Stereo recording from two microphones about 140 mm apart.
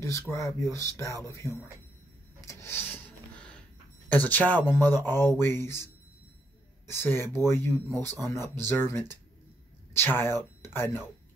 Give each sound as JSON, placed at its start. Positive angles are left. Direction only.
{"t": 0.0, "sound": "speech", "side_deg": 20}
{"t": 2.4, "sound": "rub", "side_deg": 20}
{"t": 4.1, "sound": "speech", "side_deg": 10}
{"t": 6.9, "sound": "speech", "side_deg": 15}